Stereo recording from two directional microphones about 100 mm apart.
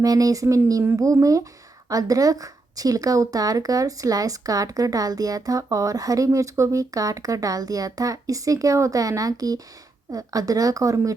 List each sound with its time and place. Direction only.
0.0 s speech: 35° right (ahead or behind)